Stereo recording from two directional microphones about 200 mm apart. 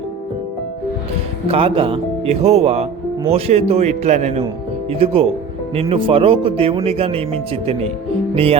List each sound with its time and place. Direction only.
1.5 s a man's voice: 30° right (ahead or behind)